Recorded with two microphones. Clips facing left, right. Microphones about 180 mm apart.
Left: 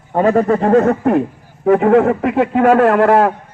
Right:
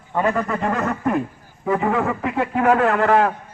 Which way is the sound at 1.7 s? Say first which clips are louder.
Left 10 dB; 65° left (ahead or behind).